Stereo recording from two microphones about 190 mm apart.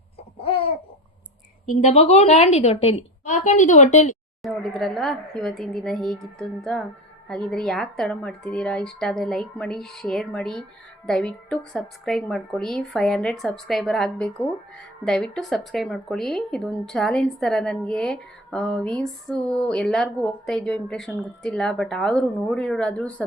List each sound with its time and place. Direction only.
1.7 s a woman's voice: 35° left (ahead or behind)
4.4 s a woman's voice: centre (ahead or behind)